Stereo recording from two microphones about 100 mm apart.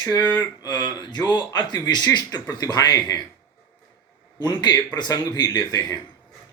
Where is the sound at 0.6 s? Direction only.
45° left (ahead or behind).